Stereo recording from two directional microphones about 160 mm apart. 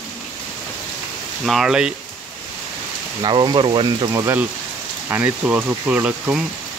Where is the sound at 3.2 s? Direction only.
25° right (ahead or behind).